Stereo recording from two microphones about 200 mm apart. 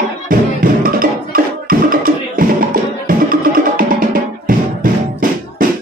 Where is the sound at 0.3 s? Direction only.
45° right (ahead or behind).